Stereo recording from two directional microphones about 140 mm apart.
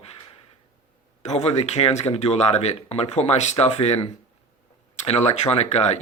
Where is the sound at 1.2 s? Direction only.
50° left (ahead or behind).